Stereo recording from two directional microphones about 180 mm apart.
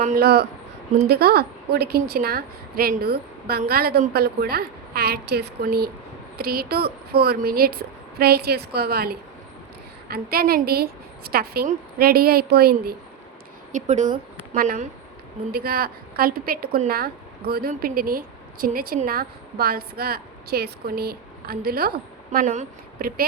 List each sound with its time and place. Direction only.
0.2 s a woman's voice: 60° right (ahead or behind)
13.7 s a woman's voice: 40° right (ahead or behind)